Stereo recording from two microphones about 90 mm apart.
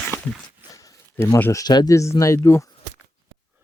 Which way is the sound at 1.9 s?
35° left (ahead or behind).